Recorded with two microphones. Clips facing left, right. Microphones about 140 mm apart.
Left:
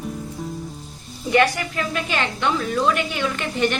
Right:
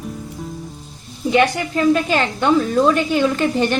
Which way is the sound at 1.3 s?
20° right (ahead or behind).